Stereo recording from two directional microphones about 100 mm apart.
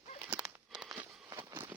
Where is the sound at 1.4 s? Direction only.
25° right (ahead or behind).